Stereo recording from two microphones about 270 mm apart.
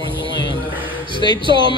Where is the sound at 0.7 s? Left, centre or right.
Centre.